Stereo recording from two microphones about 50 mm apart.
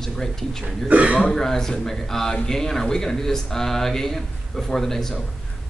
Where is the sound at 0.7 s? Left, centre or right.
Right.